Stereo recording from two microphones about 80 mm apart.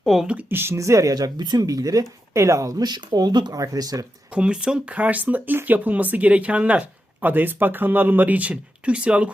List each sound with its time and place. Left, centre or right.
0.0 s speech: centre
0.5 s speech: right
0.8 s speech: right
3.6 s speech: right
4.4 s speech: centre